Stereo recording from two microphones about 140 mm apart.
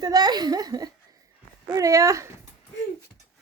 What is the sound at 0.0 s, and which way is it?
Speech, 30° right (ahead or behind).